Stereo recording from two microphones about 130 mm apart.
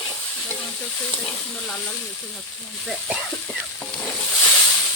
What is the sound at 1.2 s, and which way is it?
Speech, centre (ahead or behind).